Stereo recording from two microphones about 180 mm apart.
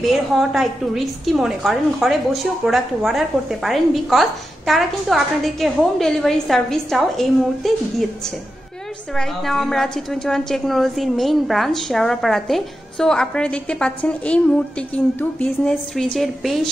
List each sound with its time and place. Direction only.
0.0 s a woman's voice: centre (ahead or behind)
9.1 s a woman's voice: centre (ahead or behind)